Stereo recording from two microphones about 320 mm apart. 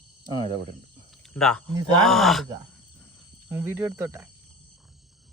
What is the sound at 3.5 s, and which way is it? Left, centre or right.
Speech, centre.